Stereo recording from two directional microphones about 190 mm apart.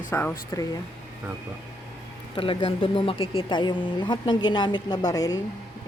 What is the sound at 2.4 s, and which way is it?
Speech, 30° left (ahead or behind).